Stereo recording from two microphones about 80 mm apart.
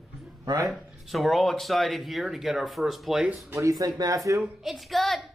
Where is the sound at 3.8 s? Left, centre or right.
Right.